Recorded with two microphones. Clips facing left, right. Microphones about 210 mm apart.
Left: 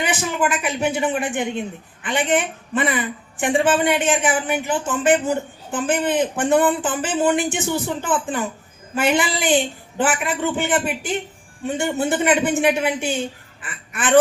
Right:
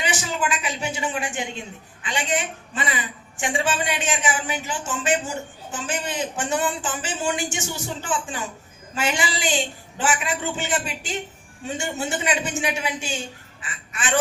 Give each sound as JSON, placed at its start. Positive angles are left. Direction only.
{"t": 0.0, "sound": "a man's voice", "side_deg": 55}